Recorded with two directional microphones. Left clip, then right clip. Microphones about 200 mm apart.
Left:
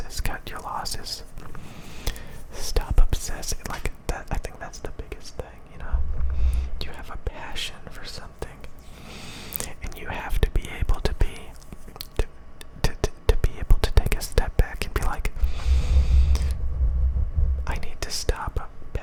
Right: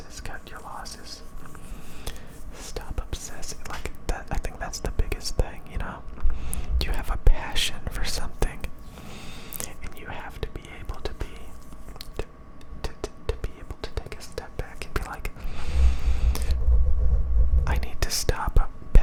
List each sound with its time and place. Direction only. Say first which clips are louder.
0.1 s whispering: left 6 dB; 20° left (ahead or behind)
2.1 s a sound: left 5 dB; 10° left (ahead or behind)
2.7 s whispering: left 5 dB; 20° left (ahead or behind); by 6.0 s 15° right (ahead or behind)
6.5 s speech: right 6 dB; 10° right (ahead or behind)
9.0 s whispering: left 3 dB; 5° left (ahead or behind)
12.8 s whispering: left 7 dB; 15° left (ahead or behind)
15.0 s gasp: left 4 dB; 5° left (ahead or behind)
17.7 s whispering: right 2 dB; 5° right (ahead or behind)